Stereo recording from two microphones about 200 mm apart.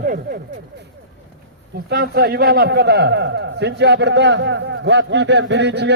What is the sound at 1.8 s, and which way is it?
A man's voice, 50° right (ahead or behind).